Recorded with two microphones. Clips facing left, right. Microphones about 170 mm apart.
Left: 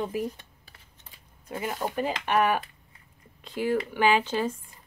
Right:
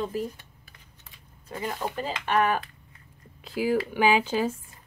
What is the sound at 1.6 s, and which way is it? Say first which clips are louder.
Speech: left 2 dB; 15° left (ahead or behind).